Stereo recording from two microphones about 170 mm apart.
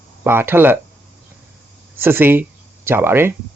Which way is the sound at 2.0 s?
10° right (ahead or behind).